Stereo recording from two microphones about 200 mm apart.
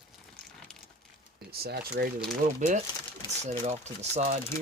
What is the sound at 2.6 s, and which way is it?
Speech, 40° right (ahead or behind).